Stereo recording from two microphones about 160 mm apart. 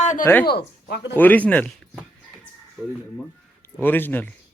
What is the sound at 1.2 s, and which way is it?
Speech, 10° left (ahead or behind).